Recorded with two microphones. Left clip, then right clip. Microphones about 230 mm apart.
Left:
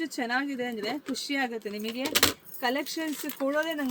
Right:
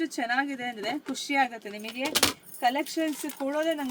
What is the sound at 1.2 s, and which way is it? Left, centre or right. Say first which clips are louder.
Speech: right 7 dB; centre.